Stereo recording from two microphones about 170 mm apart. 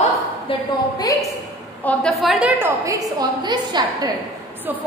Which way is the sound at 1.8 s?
5° left (ahead or behind).